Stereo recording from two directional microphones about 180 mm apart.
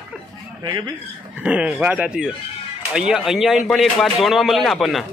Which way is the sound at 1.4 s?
5° right (ahead or behind).